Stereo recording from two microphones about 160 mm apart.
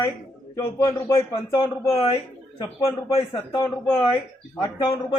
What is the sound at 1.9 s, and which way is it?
Speech, 35° left (ahead or behind).